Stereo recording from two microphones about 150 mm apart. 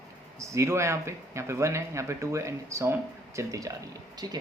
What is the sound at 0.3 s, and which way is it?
Speech, 20° right (ahead or behind).